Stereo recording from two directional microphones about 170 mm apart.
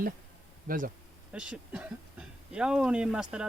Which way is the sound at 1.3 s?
5° right (ahead or behind).